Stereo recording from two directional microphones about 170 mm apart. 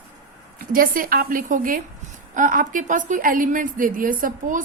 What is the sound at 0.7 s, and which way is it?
A woman's voice, 55° right (ahead or behind).